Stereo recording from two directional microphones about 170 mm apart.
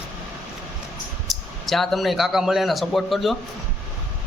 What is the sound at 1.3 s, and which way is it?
Speech, centre (ahead or behind).